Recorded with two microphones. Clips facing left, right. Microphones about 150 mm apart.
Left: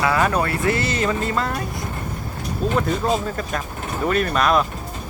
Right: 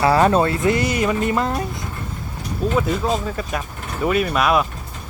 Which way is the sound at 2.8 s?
Centre (ahead or behind).